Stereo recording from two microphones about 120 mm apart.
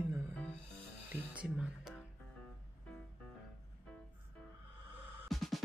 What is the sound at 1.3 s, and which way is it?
Music, 5° right (ahead or behind).